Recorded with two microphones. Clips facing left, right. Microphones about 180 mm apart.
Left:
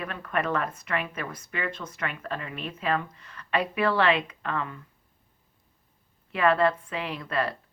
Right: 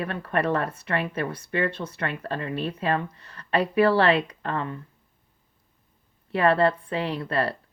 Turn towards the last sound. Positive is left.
turn(degrees=-35)  # may be behind; listen again after turning